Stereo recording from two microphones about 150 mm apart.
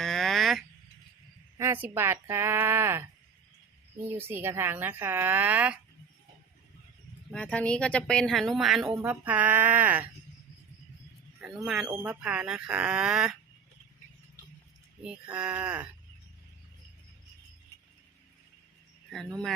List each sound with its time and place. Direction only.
0.0 s a sound: 5° left (ahead or behind)
1.5 s a sound: 15° right (ahead or behind)
2.0 s speech: 15° right (ahead or behind)
7.3 s speech: 5° left (ahead or behind); by 10.1 s 10° right (ahead or behind)
11.3 s speech: 5° right (ahead or behind)
15.0 s speech: 5° right (ahead or behind)
19.1 s speech: 5° left (ahead or behind)